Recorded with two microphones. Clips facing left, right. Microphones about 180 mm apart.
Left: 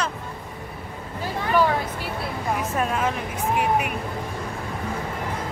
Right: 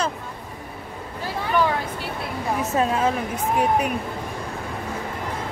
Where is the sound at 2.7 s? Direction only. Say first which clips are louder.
Right 5 dB; 30° right (ahead or behind).